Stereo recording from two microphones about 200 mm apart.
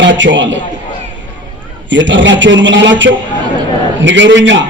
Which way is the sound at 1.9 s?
65° right (ahead or behind).